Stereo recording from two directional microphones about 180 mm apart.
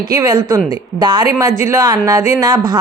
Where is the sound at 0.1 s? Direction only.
20° right (ahead or behind).